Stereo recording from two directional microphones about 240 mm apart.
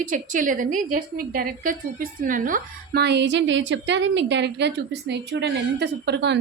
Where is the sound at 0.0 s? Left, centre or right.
Right.